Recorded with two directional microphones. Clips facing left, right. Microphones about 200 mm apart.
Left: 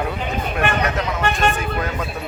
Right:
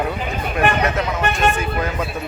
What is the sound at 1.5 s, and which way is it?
Speech, centre (ahead or behind).